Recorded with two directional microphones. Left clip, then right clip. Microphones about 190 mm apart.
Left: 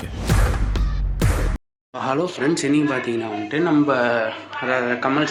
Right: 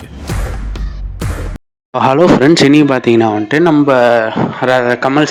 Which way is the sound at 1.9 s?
50° right (ahead or behind).